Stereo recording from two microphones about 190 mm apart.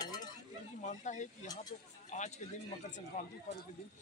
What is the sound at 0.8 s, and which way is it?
A man's voice, 40° left (ahead or behind).